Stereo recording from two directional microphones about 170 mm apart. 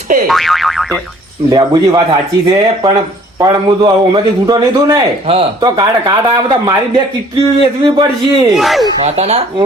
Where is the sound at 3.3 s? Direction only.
25° right (ahead or behind).